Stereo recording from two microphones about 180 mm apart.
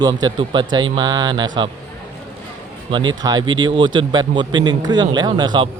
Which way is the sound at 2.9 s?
25° right (ahead or behind).